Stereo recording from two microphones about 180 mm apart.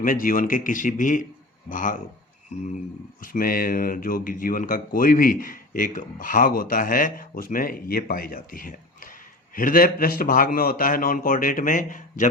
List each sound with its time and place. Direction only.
0.0 s speech: 50° left (ahead or behind)
3.2 s speech: 50° left (ahead or behind)